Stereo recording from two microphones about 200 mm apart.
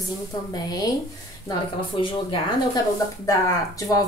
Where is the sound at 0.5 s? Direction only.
20° left (ahead or behind).